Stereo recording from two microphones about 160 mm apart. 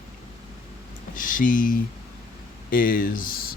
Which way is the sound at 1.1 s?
55° left (ahead or behind).